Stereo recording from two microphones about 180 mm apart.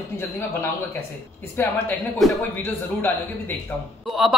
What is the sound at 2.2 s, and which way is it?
Speech, centre (ahead or behind).